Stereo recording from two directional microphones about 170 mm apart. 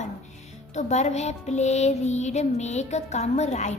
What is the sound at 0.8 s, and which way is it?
Music, 40° left (ahead or behind).